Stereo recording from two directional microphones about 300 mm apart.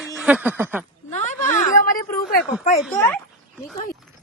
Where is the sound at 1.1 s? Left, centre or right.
Left.